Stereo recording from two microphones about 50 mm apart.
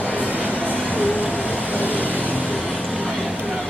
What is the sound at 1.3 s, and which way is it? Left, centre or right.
Vehicle, left.